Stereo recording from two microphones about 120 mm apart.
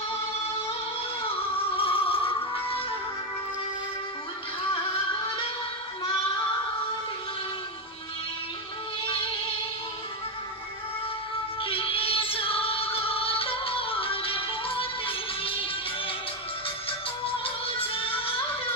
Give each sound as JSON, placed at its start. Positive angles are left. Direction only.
{"t": 1.5, "sound": "music", "side_deg": 50}
{"t": 11.6, "sound": "music", "side_deg": 50}
{"t": 17.3, "sound": "music", "side_deg": 50}